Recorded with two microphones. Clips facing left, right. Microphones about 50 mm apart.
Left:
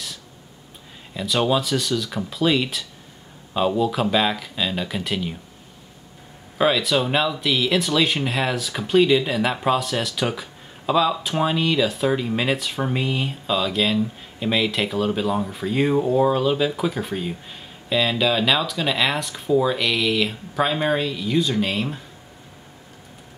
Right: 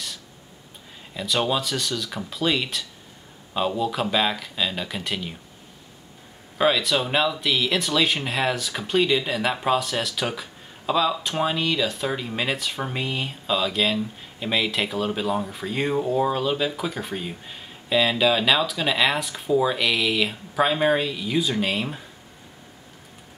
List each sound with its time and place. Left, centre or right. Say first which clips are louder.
1.1 s speech: left 3 dB; centre
6.6 s speech: left 2 dB; centre